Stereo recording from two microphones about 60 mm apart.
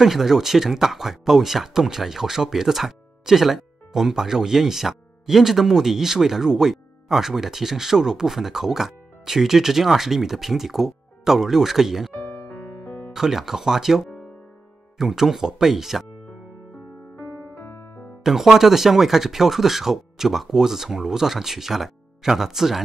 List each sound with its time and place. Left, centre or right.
0.0 s speech: centre
12.1 s music: left
13.1 s speech: centre
17.6 s music: left
18.2 s speech: centre